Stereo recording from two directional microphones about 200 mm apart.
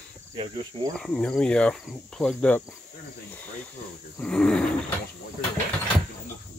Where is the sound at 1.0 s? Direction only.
5° left (ahead or behind).